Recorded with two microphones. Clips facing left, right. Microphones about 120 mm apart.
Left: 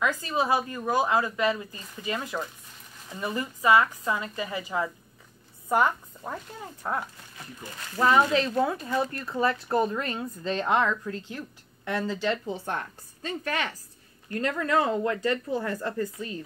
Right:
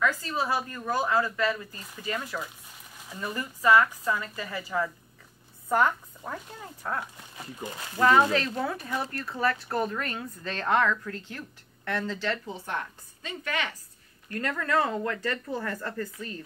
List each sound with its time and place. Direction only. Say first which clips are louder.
0.0 s speech: left 1 dB; 15° left (ahead or behind)
12.6 s a woman's voice: left 1 dB; 40° left (ahead or behind)
14.5 s speech: left 2 dB; 20° left (ahead or behind)